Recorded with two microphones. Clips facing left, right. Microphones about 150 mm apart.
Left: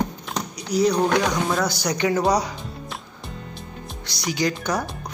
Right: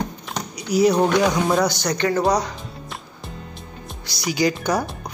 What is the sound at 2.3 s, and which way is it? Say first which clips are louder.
Music: even; 10° left (ahead or behind).